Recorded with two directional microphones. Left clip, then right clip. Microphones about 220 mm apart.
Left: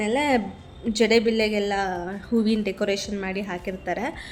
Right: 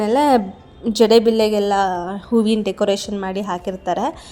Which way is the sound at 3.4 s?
5° right (ahead or behind).